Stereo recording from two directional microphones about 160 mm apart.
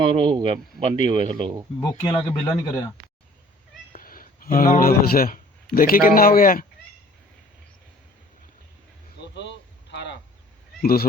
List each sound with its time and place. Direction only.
0.0 s speech: 30° right (ahead or behind)
1.8 s speech: 25° left (ahead or behind)
3.9 s a man's voice: 65° left (ahead or behind)
9.2 s a sound: 90° left